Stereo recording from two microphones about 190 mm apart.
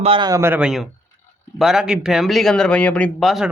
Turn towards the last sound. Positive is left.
turn(degrees=0)  # may be behind; listen again after turning